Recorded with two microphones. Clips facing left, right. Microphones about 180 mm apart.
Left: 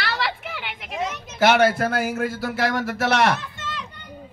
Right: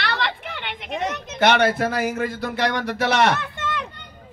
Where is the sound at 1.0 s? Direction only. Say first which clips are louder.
Right 4 dB; 65° right (ahead or behind).